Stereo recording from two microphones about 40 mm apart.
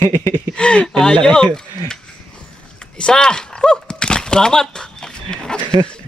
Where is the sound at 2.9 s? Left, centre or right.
Left.